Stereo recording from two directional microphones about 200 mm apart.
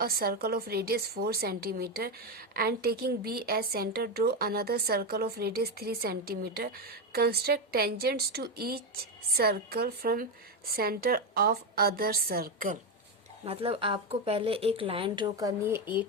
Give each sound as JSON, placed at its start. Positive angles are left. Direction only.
{"t": 0.0, "sound": "a woman's voice", "side_deg": -50}
{"t": 13.4, "sound": "speech", "side_deg": -30}